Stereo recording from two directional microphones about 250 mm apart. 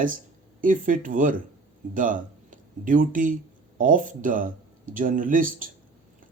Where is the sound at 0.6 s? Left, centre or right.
Right.